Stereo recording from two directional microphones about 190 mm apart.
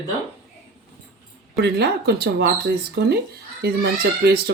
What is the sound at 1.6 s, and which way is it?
Speech, 55° right (ahead or behind).